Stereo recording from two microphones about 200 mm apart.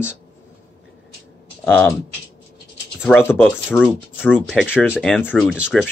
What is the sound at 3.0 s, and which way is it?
Speech, 5° left (ahead or behind).